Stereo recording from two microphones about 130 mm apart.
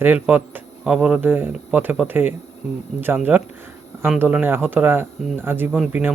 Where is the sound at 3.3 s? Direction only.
15° right (ahead or behind).